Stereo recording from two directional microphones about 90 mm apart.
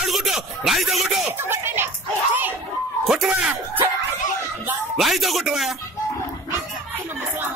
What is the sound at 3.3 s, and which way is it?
Music, 20° right (ahead or behind).